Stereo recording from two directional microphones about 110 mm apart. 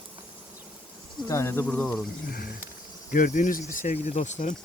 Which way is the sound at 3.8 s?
90° left.